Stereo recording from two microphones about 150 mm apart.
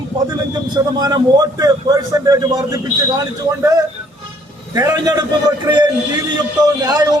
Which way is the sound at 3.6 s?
20° right (ahead or behind).